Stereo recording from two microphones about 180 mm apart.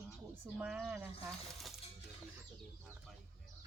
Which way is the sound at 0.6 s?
5° right (ahead or behind).